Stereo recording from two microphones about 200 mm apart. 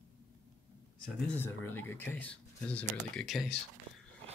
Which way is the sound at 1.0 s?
5° left (ahead or behind).